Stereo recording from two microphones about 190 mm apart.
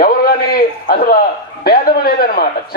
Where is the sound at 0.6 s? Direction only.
50° left (ahead or behind).